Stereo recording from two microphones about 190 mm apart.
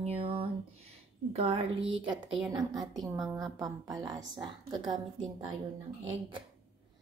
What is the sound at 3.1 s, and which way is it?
Speech, centre (ahead or behind).